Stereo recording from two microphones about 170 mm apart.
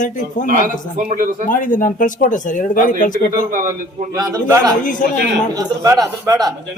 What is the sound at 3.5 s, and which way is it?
Speech, 50° right (ahead or behind).